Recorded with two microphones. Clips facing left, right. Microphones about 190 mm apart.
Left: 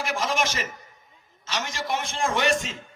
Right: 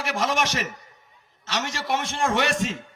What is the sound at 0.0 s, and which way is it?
A man's voice, 70° right (ahead or behind).